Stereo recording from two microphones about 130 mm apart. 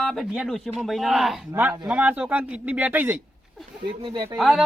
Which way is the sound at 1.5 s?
15° right (ahead or behind).